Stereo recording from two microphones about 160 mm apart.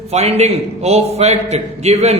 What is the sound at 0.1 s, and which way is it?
A man's voice, 45° right (ahead or behind).